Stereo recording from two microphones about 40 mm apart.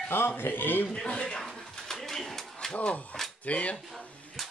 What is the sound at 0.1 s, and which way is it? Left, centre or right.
Speech, left.